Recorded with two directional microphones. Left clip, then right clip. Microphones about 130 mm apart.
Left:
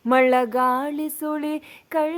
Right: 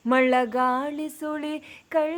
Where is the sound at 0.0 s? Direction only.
40° left (ahead or behind).